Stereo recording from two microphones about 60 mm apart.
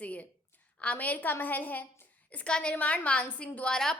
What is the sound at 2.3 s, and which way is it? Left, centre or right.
A woman's voice, centre.